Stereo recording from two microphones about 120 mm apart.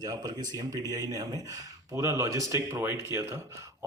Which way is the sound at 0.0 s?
35° right (ahead or behind).